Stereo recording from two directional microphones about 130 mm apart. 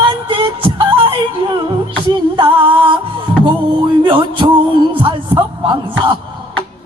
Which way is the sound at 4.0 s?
40° right (ahead or behind).